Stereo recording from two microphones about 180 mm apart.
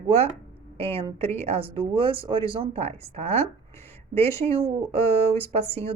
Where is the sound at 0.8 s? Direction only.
30° right (ahead or behind).